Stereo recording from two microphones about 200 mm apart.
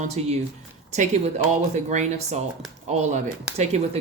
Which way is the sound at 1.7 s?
35° right (ahead or behind).